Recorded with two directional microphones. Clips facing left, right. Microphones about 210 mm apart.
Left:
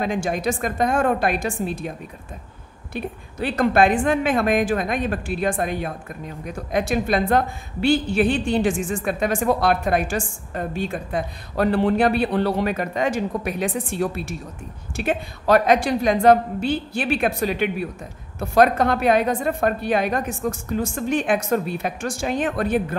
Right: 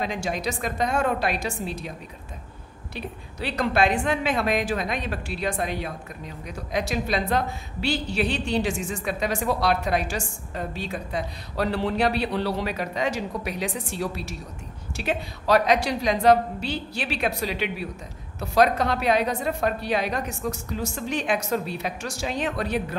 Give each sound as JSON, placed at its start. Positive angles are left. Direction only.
{"t": 0.0, "sound": "a woman's voice", "side_deg": 50}